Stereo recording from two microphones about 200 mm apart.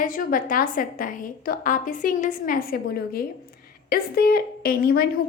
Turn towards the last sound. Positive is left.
turn(degrees=50)  # may be behind; listen again after turning